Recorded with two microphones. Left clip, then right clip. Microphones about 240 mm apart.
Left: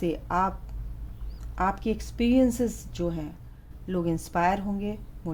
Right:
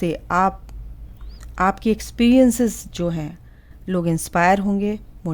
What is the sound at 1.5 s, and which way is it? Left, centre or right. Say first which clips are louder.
Speech: right 8 dB; right.